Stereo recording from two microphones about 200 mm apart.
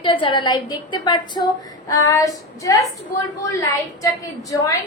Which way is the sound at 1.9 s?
15° left (ahead or behind).